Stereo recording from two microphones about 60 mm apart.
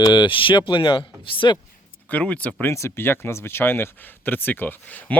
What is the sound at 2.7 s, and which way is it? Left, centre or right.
Speech, left.